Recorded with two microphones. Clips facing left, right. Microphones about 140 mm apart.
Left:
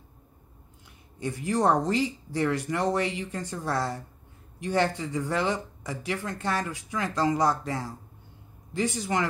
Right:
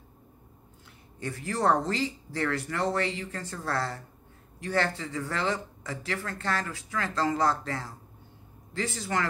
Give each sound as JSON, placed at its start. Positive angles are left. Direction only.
{"t": 1.2, "sound": "speech", "side_deg": 15}